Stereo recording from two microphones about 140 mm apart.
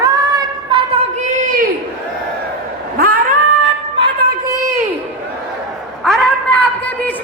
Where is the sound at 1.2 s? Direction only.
70° right (ahead or behind).